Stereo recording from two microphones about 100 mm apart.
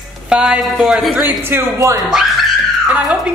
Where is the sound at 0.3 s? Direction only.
10° right (ahead or behind).